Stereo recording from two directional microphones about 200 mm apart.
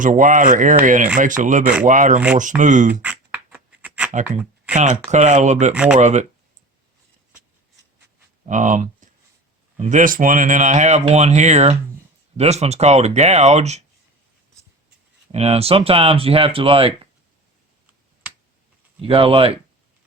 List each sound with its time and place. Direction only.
0.0 s speech: 40° right (ahead or behind)
3.0 s a sound: 5° right (ahead or behind)
4.7 s speech: 35° right (ahead or behind)
5.7 s speech: 5° right (ahead or behind)
6.0 s speech: 35° right (ahead or behind)
8.4 s speech: 40° right (ahead or behind)
15.3 s speech: 30° right (ahead or behind)
19.0 s speech: 25° right (ahead or behind)